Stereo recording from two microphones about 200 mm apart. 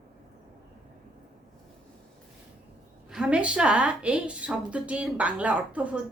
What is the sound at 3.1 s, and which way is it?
A woman's voice, 5° right (ahead or behind).